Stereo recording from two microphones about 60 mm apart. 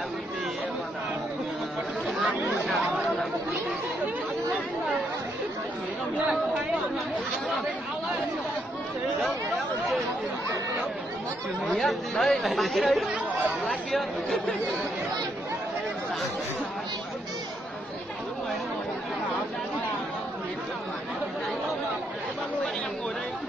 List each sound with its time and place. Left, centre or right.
2.0 s chatter: centre
11.8 s speech: centre
13.1 s speech: right